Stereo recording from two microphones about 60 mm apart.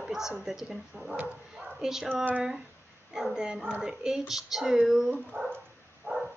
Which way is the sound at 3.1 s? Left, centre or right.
Centre.